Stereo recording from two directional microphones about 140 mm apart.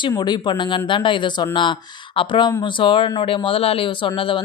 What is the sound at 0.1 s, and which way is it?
Speech, 30° left (ahead or behind).